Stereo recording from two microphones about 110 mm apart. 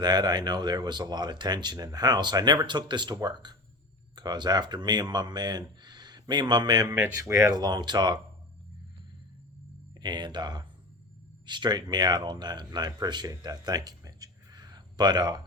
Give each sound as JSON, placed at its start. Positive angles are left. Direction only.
{"t": 0.0, "sound": "speech", "side_deg": -40}
{"t": 6.8, "sound": "speech", "side_deg": -20}
{"t": 10.0, "sound": "speech", "side_deg": -40}